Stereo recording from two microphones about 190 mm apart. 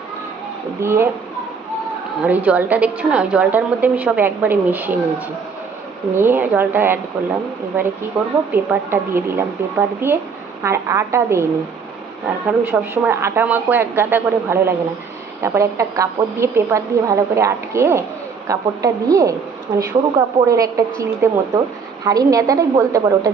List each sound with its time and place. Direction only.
0.8 s a woman's voice: 15° right (ahead or behind)
2.2 s a woman's voice: 10° right (ahead or behind)
6.1 s a woman's voice: 10° right (ahead or behind)
8.5 s a woman's voice: 10° right (ahead or behind)
12.5 s a woman's voice: 10° right (ahead or behind)